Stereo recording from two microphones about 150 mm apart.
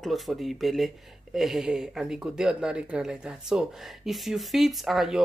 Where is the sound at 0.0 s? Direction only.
Centre (ahead or behind).